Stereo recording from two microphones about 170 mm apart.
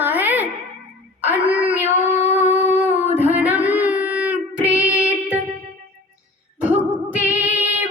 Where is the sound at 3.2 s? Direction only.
10° right (ahead or behind).